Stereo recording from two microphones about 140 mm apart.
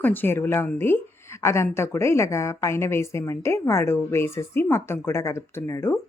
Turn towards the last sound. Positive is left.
turn(degrees=20)  # may be behind; listen again after turning